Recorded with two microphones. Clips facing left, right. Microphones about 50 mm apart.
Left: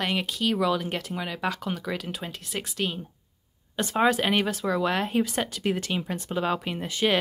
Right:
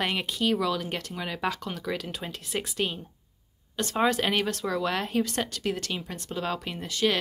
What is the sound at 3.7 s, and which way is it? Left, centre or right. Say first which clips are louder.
Speech: left 2 dB; centre.